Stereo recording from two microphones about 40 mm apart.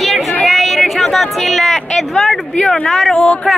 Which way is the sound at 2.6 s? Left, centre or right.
Centre.